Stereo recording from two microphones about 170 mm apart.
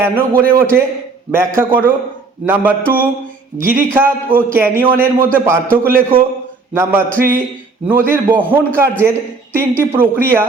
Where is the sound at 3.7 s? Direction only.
10° right (ahead or behind).